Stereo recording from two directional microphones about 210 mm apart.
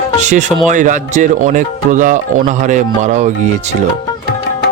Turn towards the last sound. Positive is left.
turn(degrees=-35)  # may be behind; listen again after turning